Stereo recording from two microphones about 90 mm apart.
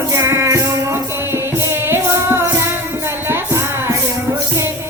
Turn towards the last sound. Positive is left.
turn(degrees=-30)  # may be behind; listen again after turning